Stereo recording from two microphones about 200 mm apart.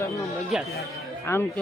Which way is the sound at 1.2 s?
10° left (ahead or behind).